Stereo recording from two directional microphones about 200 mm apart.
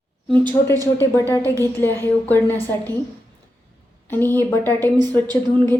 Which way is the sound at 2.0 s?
10° left (ahead or behind).